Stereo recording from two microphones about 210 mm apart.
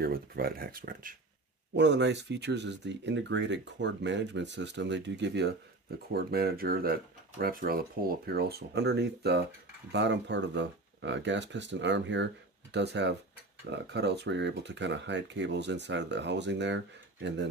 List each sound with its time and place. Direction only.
0.0 s speech: 45° right (ahead or behind)
1.8 s speech: 55° right (ahead or behind)